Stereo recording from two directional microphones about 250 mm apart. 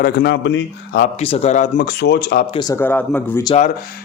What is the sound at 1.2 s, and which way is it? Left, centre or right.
Speech, left.